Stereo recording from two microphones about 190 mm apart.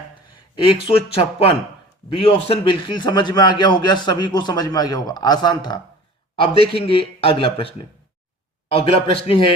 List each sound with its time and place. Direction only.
0.5 s a man's voice: 30° left (ahead or behind)
8.7 s a man's voice: 30° left (ahead or behind)